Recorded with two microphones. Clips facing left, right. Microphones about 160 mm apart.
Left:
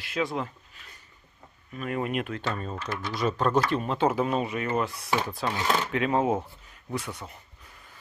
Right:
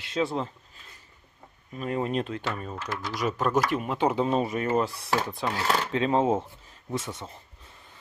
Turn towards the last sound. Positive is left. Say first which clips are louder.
# even
turn(degrees=-25)  # may be behind; listen again after turning